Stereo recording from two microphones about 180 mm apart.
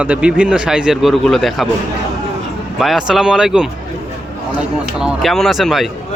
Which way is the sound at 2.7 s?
Centre (ahead or behind).